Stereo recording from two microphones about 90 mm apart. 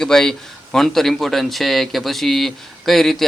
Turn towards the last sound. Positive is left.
turn(degrees=5)  # may be behind; listen again after turning